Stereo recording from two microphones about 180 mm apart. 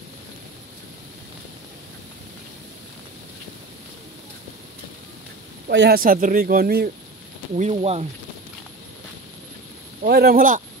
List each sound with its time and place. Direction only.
5.7 s speech: 65° right (ahead or behind)
7.5 s speech: 35° right (ahead or behind)
10.0 s speech: 60° right (ahead or behind)